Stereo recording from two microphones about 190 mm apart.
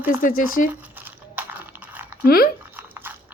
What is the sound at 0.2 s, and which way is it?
Speech, 45° left (ahead or behind).